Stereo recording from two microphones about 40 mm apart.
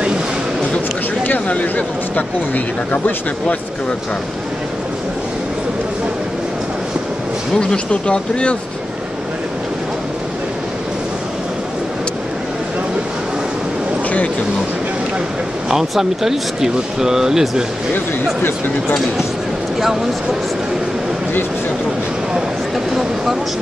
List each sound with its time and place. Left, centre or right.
1.5 s speech: left
7.7 s speech: left
15.7 s speech: centre
17.9 s speech: left